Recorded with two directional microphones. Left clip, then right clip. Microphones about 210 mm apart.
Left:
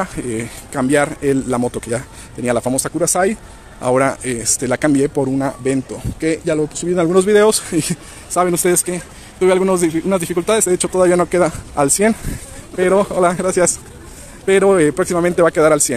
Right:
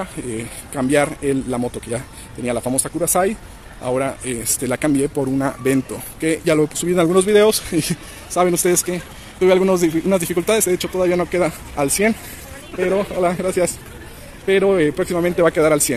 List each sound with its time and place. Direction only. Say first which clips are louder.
0.0 s speech: left 5 dB; 15° left (ahead or behind)
6.5 s speech: right 1 dB; 10° right (ahead or behind)